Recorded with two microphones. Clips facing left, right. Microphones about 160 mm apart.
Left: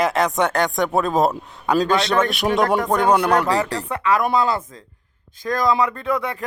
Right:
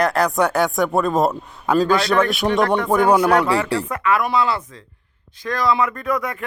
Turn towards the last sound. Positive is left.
turn(degrees=30)  # may be behind; listen again after turning